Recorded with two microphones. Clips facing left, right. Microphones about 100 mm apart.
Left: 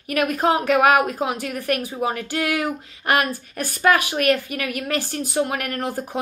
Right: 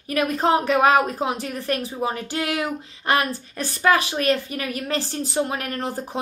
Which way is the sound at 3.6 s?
25° right (ahead or behind).